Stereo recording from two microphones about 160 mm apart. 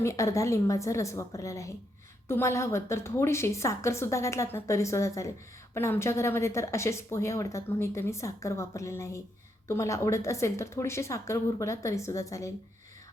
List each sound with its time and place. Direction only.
0.0 s a woman's voice: 20° left (ahead or behind)